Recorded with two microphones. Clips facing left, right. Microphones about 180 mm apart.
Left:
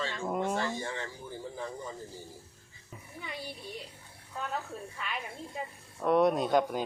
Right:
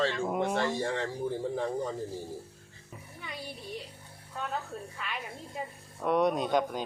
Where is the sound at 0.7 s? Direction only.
70° right (ahead or behind).